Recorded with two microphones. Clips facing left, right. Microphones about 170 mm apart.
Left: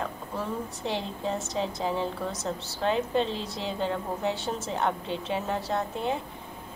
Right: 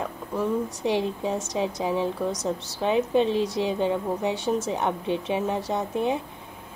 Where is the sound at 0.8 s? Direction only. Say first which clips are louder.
Right 5 dB; 15° right (ahead or behind).